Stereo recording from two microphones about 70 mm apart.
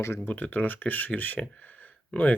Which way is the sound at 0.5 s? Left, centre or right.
Left.